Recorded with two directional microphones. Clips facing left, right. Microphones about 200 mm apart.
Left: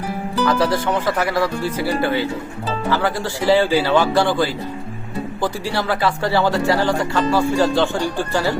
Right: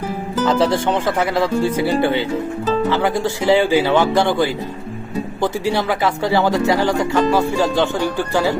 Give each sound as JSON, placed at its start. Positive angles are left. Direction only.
{"t": 0.4, "sound": "speech", "side_deg": -25}